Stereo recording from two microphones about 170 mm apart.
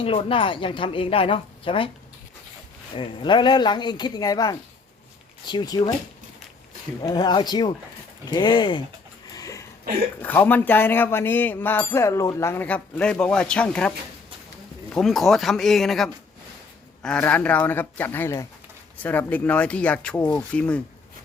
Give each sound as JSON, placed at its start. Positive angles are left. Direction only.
{"t": 0.0, "sound": "speech", "side_deg": 30}
{"t": 2.9, "sound": "speech", "side_deg": 30}
{"t": 7.0, "sound": "speech", "side_deg": 25}
{"t": 9.3, "sound": "a sound", "side_deg": 20}
{"t": 10.2, "sound": "speech", "side_deg": 10}